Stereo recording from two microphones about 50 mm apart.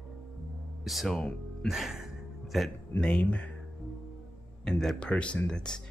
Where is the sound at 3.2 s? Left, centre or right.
Left.